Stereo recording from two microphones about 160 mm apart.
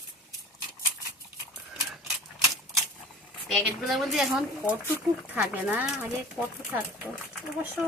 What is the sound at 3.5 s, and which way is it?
Speech, centre (ahead or behind).